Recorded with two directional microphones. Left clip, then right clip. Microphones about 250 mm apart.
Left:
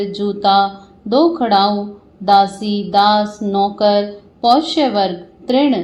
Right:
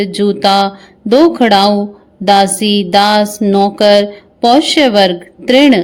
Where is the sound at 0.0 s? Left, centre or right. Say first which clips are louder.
Right 5 dB; right.